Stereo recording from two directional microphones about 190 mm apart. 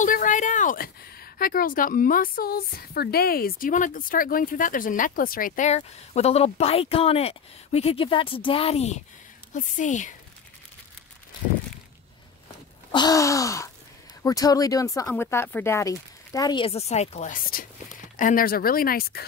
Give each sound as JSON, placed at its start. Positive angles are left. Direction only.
{"t": 0.0, "sound": "a woman's voice", "side_deg": 45}
{"t": 12.9, "sound": "gasp", "side_deg": 20}
{"t": 14.2, "sound": "speech", "side_deg": 20}